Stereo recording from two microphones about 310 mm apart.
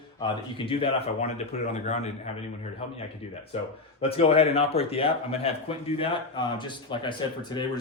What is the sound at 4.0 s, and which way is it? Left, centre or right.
A man's voice, centre.